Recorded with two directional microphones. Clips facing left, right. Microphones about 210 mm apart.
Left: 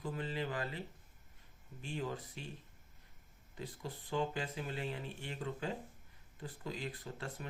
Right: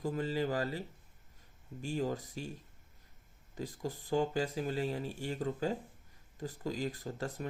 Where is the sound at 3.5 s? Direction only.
40° right (ahead or behind).